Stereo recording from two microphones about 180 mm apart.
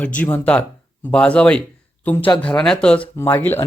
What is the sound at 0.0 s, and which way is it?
Speech, 5° left (ahead or behind).